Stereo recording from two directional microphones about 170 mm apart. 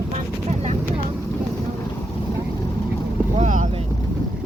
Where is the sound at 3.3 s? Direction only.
45° right (ahead or behind).